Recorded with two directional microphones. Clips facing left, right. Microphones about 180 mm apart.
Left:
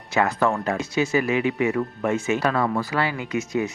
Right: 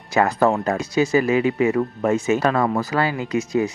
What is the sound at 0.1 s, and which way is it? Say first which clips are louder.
Speech: right 4 dB; 40° right (ahead or behind).